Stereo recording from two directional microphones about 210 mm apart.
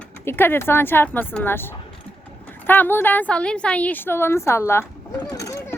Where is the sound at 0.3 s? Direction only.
10° left (ahead or behind).